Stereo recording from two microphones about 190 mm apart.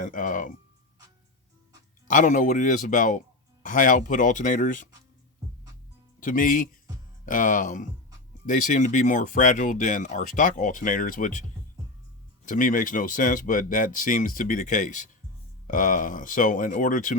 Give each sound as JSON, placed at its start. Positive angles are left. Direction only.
{"t": 0.0, "sound": "speech", "side_deg": 45}
{"t": 2.0, "sound": "speech", "side_deg": 45}
{"t": 6.1, "sound": "speech", "side_deg": 45}
{"t": 12.5, "sound": "speech", "side_deg": 45}